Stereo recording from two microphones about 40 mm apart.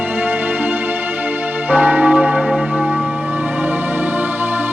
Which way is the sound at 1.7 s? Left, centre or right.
Right.